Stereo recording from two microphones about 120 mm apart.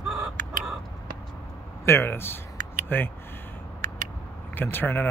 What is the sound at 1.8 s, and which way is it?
Speech, 20° left (ahead or behind).